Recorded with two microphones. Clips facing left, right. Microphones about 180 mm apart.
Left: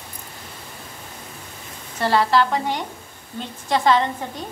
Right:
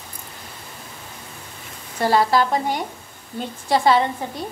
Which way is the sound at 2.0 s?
10° right (ahead or behind).